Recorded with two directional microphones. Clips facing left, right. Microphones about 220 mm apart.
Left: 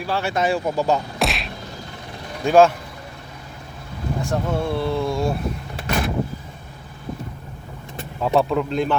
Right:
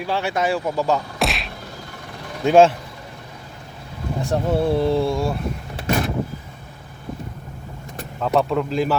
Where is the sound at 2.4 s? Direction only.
25° right (ahead or behind).